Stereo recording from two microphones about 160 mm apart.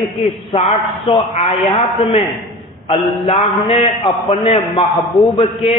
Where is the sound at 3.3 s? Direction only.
35° left (ahead or behind).